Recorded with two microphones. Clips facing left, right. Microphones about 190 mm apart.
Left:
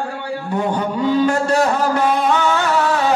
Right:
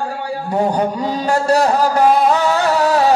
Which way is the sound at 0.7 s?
40° right (ahead or behind).